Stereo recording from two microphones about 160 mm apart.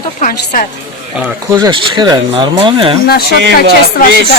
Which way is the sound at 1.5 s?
25° right (ahead or behind).